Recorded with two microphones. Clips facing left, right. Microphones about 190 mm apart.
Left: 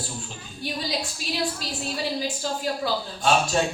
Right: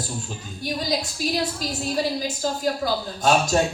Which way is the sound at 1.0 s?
40° right (ahead or behind).